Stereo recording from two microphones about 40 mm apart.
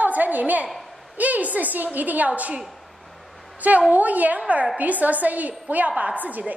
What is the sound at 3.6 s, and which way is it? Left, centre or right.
A woman's voice, right.